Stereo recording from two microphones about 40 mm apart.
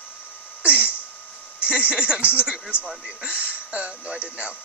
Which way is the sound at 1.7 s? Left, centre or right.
Right.